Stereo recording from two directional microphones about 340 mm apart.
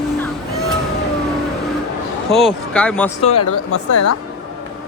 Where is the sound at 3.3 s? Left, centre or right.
Left.